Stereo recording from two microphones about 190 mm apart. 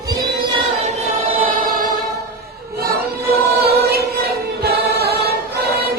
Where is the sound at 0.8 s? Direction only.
40° right (ahead or behind).